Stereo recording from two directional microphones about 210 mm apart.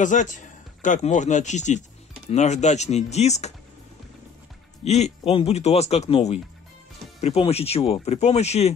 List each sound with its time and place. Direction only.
0.0 s speech: 35° left (ahead or behind)
4.8 s speech: 30° left (ahead or behind)